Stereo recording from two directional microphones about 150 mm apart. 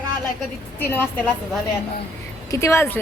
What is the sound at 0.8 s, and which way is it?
Speech, 15° left (ahead or behind).